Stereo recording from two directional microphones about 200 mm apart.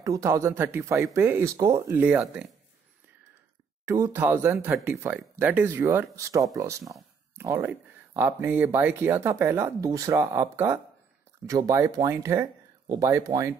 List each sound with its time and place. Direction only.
0.0 s speech: 15° right (ahead or behind)
3.8 s speech: 15° right (ahead or behind)